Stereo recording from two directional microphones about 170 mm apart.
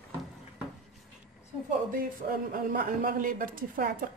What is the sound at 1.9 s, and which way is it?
A man's voice, 60° right (ahead or behind).